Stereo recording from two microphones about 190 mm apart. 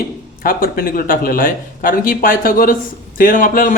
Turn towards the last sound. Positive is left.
turn(degrees=45)  # may be behind; listen again after turning